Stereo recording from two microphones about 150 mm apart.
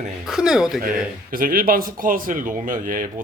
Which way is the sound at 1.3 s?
70° right (ahead or behind).